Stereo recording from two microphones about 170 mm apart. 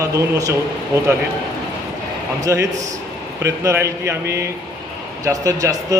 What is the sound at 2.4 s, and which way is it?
Speech, 15° right (ahead or behind).